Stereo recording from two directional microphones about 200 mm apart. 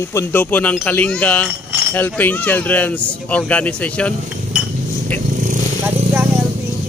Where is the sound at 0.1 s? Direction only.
10° left (ahead or behind).